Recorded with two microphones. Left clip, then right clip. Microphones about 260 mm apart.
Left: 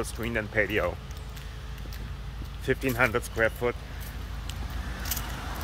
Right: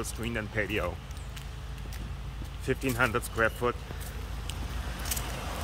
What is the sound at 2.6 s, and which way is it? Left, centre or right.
Speech, centre.